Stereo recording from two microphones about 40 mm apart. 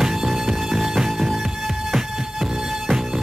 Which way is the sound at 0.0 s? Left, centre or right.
Centre.